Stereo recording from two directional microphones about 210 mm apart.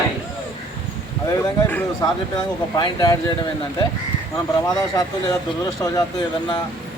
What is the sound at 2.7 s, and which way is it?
Speech, 20° left (ahead or behind).